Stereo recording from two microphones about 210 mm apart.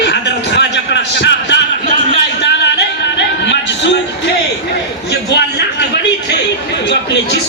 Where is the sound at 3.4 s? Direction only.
60° left (ahead or behind).